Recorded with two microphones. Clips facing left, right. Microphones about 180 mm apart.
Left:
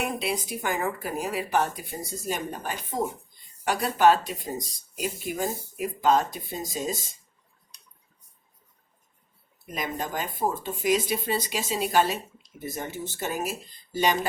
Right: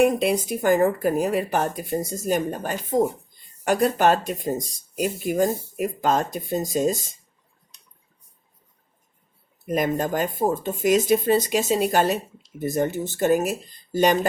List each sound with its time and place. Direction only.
0.0 s speech: 45° right (ahead or behind)
9.6 s speech: 50° right (ahead or behind)